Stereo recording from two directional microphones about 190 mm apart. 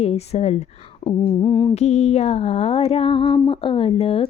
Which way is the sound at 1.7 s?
35° left (ahead or behind).